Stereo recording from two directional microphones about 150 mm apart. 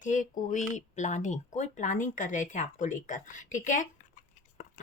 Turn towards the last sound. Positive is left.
turn(degrees=60)  # may be behind; listen again after turning